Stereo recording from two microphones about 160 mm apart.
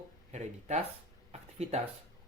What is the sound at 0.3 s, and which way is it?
Speech, 45° right (ahead or behind).